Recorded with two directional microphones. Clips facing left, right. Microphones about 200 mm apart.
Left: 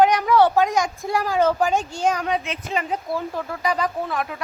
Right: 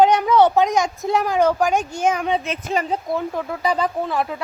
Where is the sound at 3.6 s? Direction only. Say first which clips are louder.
Right 2 dB; 30° right (ahead or behind).